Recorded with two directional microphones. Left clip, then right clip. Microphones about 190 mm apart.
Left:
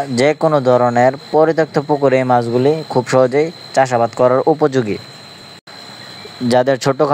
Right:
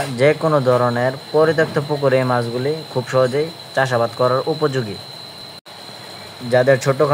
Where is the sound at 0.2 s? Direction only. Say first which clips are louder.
Left 2 dB; 35° left (ahead or behind).